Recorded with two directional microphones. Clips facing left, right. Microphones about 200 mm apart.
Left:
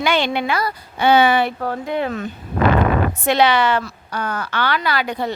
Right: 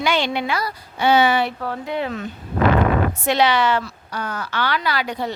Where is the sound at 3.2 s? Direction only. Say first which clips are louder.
Left 2 dB; 55° left (ahead or behind).